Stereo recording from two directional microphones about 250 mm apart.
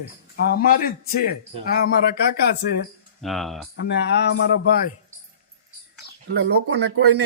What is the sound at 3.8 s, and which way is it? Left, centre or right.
Speech, left.